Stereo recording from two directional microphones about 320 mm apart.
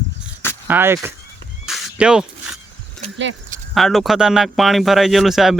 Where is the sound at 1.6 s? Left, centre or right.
Centre.